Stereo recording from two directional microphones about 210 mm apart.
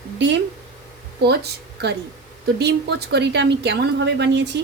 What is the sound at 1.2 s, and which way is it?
A woman's voice, 50° right (ahead or behind).